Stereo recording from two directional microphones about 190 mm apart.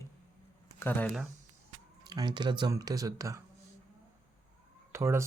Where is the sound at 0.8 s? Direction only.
10° left (ahead or behind).